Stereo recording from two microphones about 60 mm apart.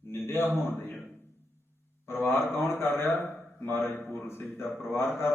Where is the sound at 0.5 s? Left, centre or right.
Left.